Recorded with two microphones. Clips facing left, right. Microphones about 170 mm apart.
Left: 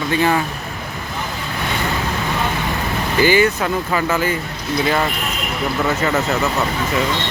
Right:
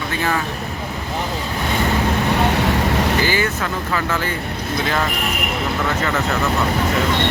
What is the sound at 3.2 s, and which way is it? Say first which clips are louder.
Speech: left 5 dB; 15° left (ahead or behind).